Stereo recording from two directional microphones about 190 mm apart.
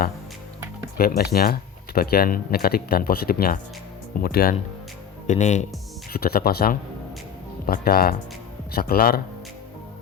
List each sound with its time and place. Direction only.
0.9 s speech: 55° left (ahead or behind)
5.3 s speech: 40° left (ahead or behind)
6.1 s speech: 50° left (ahead or behind)